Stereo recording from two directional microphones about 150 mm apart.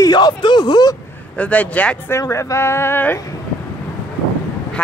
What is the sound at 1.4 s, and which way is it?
Speech, 10° left (ahead or behind).